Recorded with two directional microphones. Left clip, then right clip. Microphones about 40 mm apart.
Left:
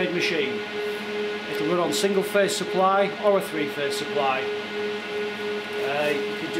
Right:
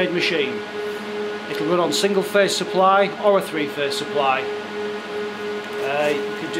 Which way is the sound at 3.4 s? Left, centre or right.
Right.